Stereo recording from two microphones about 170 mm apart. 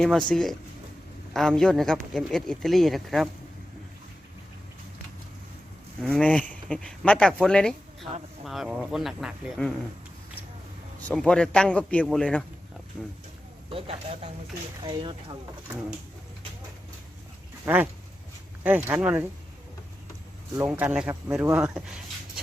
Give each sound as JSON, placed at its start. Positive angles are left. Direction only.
{"t": 0.0, "sound": "speech", "side_deg": 5}
{"t": 6.0, "sound": "speech", "side_deg": 5}
{"t": 11.1, "sound": "speech", "side_deg": 5}
{"t": 13.7, "sound": "speech", "side_deg": -35}
{"t": 17.7, "sound": "speech", "side_deg": -15}
{"t": 20.7, "sound": "speech", "side_deg": -5}